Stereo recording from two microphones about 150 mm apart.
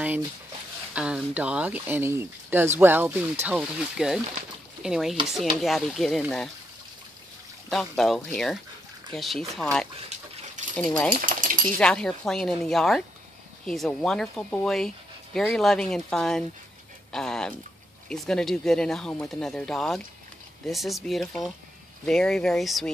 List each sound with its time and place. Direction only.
0.9 s speech: 5° right (ahead or behind)
7.7 s speech: centre (ahead or behind)
10.6 s mechanisms: 55° right (ahead or behind)
11.1 s a sound: 60° right (ahead or behind)
11.8 s speech: 5° left (ahead or behind)